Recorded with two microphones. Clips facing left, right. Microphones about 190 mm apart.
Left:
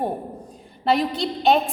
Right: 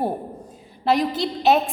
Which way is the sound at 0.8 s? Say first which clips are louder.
Right 1 dB; centre (ahead or behind).